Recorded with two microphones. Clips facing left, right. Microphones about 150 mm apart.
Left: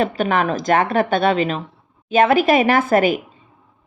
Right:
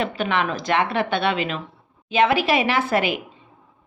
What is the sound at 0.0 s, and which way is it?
A woman's voice, 45° left (ahead or behind).